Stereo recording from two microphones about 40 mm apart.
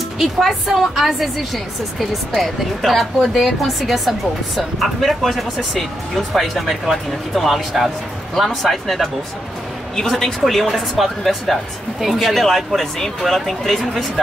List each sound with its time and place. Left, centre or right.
0.4 s speech: centre
3.2 s a woman's voice: centre
3.6 s speech: centre